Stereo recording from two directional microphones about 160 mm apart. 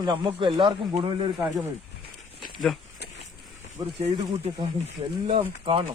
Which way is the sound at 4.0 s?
40° right (ahead or behind).